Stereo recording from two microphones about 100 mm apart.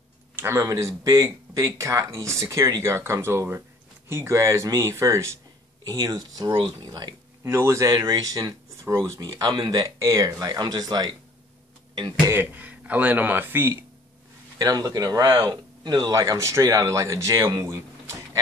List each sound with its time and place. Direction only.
0.4 s speech: 30° right (ahead or behind)
7.4 s speech: 30° right (ahead or behind)
9.4 s speech: 45° right (ahead or behind)
10.4 s speech: 40° right (ahead or behind)
12.3 s speech: 20° right (ahead or behind)
14.6 s speech: 35° right (ahead or behind)